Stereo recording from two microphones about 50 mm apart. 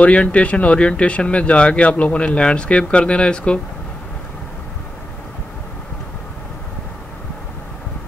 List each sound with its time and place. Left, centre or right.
0.0 s speech: left